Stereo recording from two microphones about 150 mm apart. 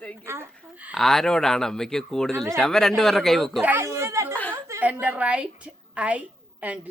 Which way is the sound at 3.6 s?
15° right (ahead or behind).